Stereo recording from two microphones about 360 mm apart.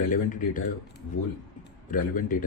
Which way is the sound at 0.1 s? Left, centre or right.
Left.